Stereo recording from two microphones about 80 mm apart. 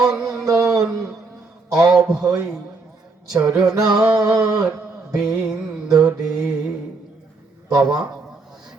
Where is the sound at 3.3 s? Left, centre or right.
Right.